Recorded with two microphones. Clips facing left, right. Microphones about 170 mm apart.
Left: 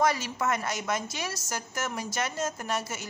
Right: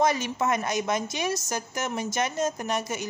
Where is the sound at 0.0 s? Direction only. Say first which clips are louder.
Right 2 dB; 20° right (ahead or behind).